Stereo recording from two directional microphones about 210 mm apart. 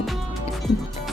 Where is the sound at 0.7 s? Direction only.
Centre (ahead or behind).